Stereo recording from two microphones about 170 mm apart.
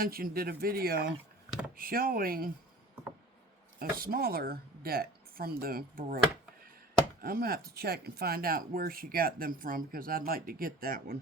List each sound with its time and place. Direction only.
0.0 s speech: 60° right (ahead or behind)
3.8 s speech: 60° right (ahead or behind)
7.2 s speech: 60° right (ahead or behind)